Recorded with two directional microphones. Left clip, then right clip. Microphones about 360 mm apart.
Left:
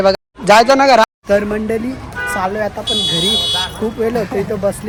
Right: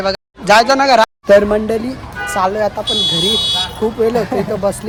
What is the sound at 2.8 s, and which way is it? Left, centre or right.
Speech, centre.